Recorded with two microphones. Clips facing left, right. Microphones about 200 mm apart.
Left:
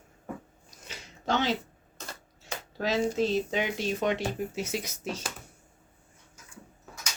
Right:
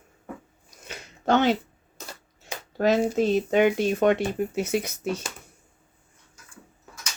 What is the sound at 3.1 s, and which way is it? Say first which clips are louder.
Speech: right 5 dB; 55° right (ahead or behind).